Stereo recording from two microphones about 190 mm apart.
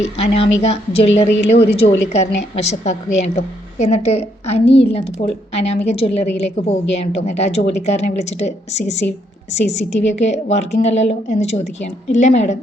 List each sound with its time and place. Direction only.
0.0 s a woman's voice: 30° left (ahead or behind)